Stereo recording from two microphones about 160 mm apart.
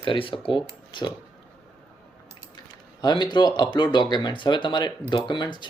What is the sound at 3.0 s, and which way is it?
Speech, 25° left (ahead or behind).